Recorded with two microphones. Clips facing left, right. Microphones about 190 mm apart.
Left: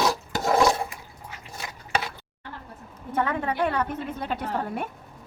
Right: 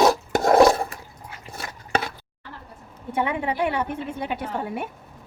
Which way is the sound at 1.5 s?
55° right (ahead or behind).